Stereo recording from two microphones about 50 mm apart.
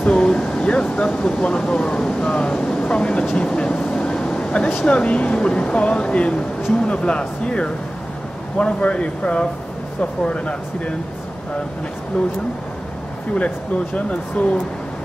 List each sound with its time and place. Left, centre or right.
0.0 s speech: left
3.9 s vehicle: centre
4.4 s a sound: left
4.8 s speech: left
13.9 s speech: left